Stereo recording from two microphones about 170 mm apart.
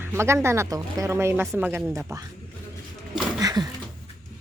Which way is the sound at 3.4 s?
25° right (ahead or behind).